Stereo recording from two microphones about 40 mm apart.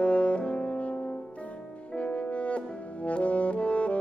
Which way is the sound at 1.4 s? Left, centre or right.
Left.